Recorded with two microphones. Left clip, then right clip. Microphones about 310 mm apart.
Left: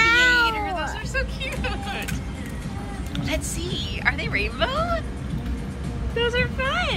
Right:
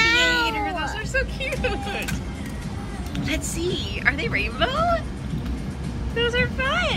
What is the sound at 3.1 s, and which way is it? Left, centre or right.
A woman's voice, centre.